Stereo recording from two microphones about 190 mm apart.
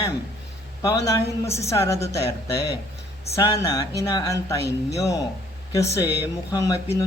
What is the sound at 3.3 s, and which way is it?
Speech, 20° left (ahead or behind).